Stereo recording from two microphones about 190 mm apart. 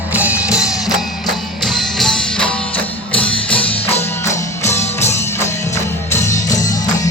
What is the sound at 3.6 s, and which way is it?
Music, 30° left (ahead or behind).